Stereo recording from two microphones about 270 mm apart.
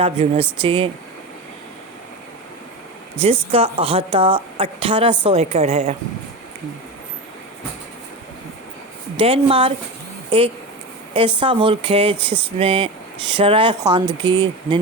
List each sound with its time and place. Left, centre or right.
0.0 s a woman's voice: right
3.2 s a woman's voice: right
9.1 s a woman's voice: right
11.1 s a woman's voice: centre